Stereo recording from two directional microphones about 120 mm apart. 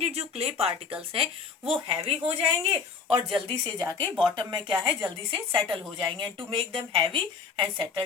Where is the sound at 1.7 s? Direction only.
45° right (ahead or behind).